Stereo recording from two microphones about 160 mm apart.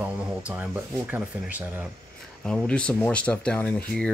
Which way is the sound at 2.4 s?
5° left (ahead or behind).